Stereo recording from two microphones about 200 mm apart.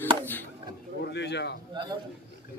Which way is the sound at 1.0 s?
55° left (ahead or behind).